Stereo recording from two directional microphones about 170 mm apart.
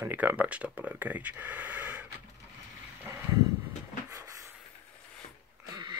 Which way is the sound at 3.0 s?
15° right (ahead or behind).